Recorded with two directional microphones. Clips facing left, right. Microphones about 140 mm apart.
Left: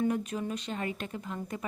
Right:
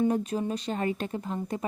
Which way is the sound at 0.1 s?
35° right (ahead or behind).